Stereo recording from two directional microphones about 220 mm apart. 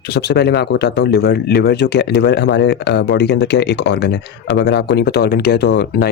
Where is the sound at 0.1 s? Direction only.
50° left (ahead or behind).